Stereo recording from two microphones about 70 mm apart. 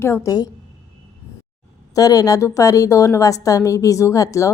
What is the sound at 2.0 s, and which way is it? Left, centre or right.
A woman's voice, left.